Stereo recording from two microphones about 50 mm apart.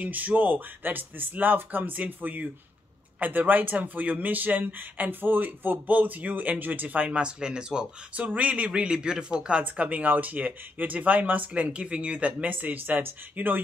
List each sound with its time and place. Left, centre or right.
0.0 s speech: right; by 8.3 s centre
8.3 s speech: right
12.4 s speech: right